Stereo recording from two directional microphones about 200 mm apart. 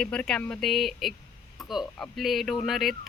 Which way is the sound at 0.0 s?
5° left (ahead or behind).